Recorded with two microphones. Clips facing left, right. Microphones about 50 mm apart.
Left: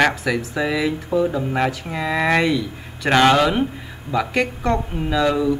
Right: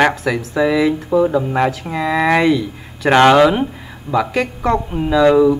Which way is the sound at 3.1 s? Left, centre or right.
Centre.